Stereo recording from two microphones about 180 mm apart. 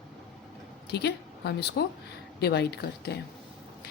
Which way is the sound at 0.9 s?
65° left (ahead or behind).